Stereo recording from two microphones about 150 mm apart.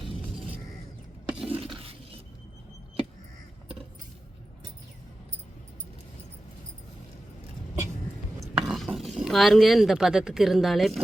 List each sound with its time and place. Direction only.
1.4 s a sound: 35° right (ahead or behind)
8.4 s stir: centre (ahead or behind)
9.0 s speech: centre (ahead or behind)